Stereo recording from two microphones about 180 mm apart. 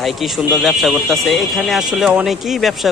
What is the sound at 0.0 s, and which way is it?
A man's voice, centre (ahead or behind).